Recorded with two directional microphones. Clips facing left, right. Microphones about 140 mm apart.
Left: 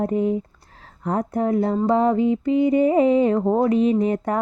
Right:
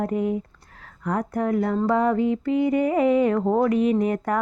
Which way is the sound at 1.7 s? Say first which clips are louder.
Left 2 dB; 15° left (ahead or behind).